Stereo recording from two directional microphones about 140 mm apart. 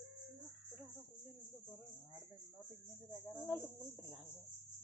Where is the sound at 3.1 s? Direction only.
15° right (ahead or behind).